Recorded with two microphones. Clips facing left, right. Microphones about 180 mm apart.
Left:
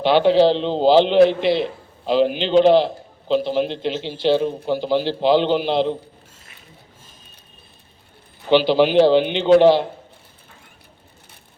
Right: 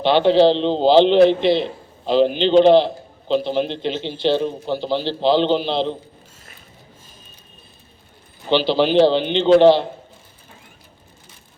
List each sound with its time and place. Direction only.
0.0 s a man's voice: 10° left (ahead or behind)
8.4 s a man's voice: 10° left (ahead or behind)